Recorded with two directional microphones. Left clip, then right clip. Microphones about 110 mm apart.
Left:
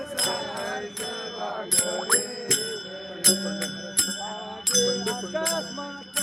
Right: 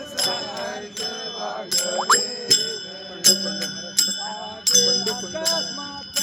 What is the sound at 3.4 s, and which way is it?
Speech, 35° right (ahead or behind).